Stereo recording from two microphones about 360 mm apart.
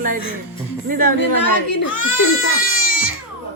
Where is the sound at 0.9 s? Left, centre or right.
Right.